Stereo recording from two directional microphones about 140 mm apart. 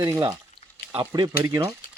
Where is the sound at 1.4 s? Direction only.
20° right (ahead or behind).